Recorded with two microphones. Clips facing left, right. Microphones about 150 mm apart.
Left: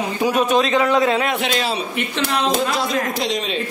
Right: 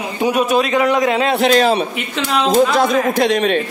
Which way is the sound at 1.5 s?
50° right (ahead or behind).